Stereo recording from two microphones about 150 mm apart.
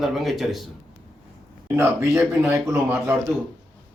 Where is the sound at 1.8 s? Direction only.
15° right (ahead or behind).